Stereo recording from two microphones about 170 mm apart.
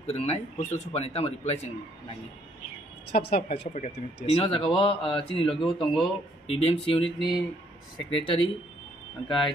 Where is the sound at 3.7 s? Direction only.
40° left (ahead or behind).